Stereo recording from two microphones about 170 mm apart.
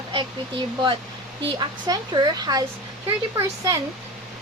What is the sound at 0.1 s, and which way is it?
A woman's voice, 30° right (ahead or behind).